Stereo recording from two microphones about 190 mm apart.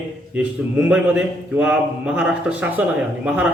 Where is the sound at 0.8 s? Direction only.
5° right (ahead or behind).